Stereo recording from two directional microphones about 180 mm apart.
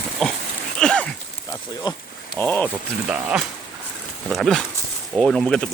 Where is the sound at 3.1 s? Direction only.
5° right (ahead or behind).